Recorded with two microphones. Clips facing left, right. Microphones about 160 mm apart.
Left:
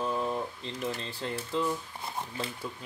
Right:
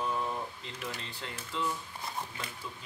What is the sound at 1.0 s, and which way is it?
Speech, 40° left (ahead or behind).